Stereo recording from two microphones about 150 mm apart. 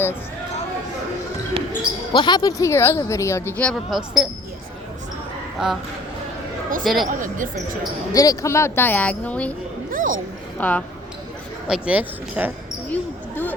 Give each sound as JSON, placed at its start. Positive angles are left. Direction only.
{"t": 2.1, "sound": "speech", "side_deg": 30}
{"t": 5.6, "sound": "speech", "side_deg": -5}
{"t": 6.8, "sound": "speech", "side_deg": 0}
{"t": 7.1, "sound": "speech", "side_deg": -60}
{"t": 8.1, "sound": "speech", "side_deg": 25}
{"t": 9.9, "sound": "a sound", "side_deg": -65}
{"t": 10.6, "sound": "speech", "side_deg": 10}
{"t": 11.7, "sound": "speech", "side_deg": -10}
{"t": 12.9, "sound": "speech", "side_deg": 10}